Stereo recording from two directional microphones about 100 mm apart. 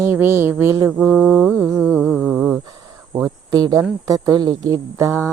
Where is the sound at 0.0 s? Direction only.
25° right (ahead or behind).